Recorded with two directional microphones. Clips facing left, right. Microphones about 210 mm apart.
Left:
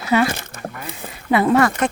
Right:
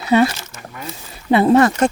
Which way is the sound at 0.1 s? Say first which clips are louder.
Right 3 dB; 25° right (ahead or behind).